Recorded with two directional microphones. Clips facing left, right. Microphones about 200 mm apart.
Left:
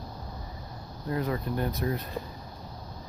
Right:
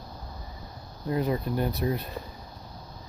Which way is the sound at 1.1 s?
20° right (ahead or behind).